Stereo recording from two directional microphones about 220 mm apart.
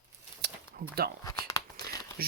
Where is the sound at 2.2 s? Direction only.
45° right (ahead or behind).